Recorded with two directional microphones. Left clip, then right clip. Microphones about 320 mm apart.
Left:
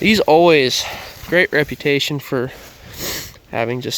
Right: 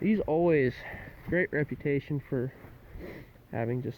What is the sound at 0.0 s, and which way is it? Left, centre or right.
Speech, left.